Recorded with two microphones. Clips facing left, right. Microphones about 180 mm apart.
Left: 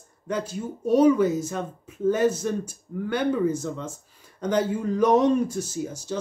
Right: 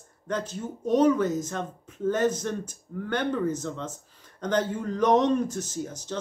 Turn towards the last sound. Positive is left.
turn(degrees=10)  # may be behind; listen again after turning